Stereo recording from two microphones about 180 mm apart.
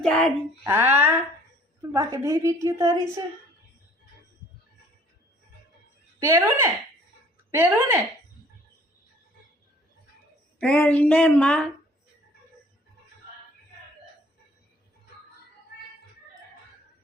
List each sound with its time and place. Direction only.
0.0 s speech: 5° left (ahead or behind)
0.6 s a woman's voice: 10° right (ahead or behind)
6.1 s a woman's voice: 15° right (ahead or behind)
10.6 s speech: 5° left (ahead or behind)